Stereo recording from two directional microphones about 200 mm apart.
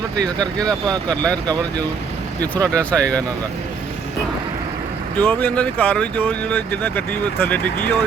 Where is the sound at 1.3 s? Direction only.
20° right (ahead or behind).